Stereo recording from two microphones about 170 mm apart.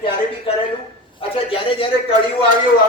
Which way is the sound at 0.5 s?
30° left (ahead or behind).